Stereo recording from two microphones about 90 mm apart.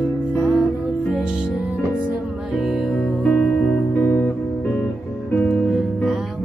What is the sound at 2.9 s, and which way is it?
Music, 10° left (ahead or behind).